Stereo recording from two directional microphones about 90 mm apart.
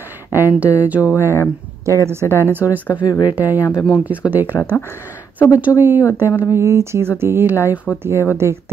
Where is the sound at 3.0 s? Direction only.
50° left (ahead or behind).